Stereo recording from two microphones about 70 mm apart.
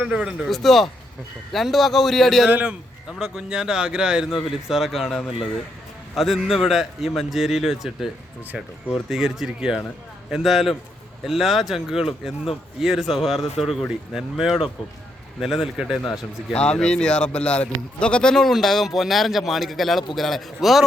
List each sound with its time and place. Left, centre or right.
0.0 s speech: centre
0.5 s a man's voice: centre
2.5 s a man's voice: right
3.1 s a man's voice: centre
16.5 s a man's voice: centre